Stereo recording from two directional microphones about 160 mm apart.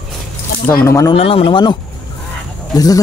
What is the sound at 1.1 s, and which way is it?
Speech, 35° left (ahead or behind).